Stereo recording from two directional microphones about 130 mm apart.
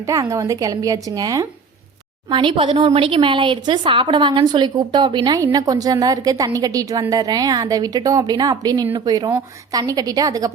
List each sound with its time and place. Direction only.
0.0 s a woman's voice: 25° right (ahead or behind)
2.3 s a woman's voice: 40° right (ahead or behind)